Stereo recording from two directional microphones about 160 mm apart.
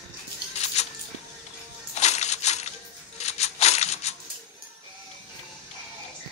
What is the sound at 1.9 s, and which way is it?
Coin, 45° left (ahead or behind).